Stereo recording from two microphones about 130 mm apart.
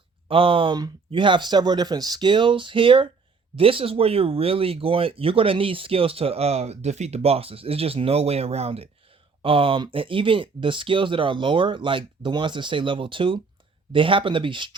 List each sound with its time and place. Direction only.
0.3 s speech: 45° right (ahead or behind)